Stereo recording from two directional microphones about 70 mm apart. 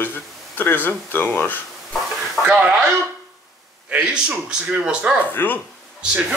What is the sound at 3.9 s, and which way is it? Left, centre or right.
A man's voice, centre.